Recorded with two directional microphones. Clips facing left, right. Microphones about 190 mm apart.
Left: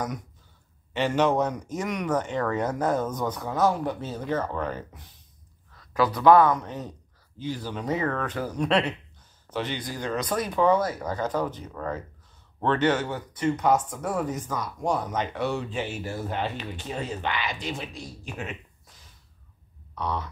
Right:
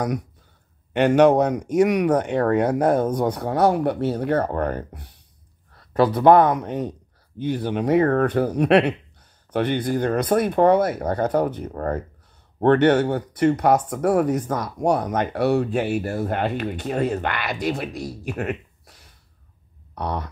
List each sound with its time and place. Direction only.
0.9 s speech: 65° right (ahead or behind)
5.9 s speech: 30° right (ahead or behind)
6.2 s speech: 60° right (ahead or behind)